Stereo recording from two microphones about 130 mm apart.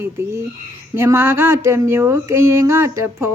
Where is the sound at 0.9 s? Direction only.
20° right (ahead or behind).